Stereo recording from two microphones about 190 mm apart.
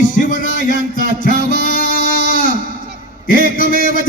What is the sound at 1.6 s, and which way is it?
Music, 45° left (ahead or behind).